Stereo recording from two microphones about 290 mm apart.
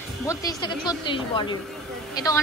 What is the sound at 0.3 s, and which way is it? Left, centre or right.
A woman's voice, centre.